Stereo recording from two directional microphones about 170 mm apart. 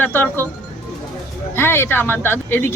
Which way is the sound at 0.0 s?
10° left (ahead or behind).